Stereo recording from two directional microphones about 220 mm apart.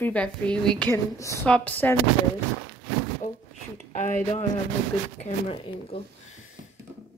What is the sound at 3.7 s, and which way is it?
Speech, 30° left (ahead or behind).